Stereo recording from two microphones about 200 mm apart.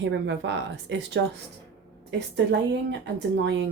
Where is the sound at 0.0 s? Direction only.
60° right (ahead or behind).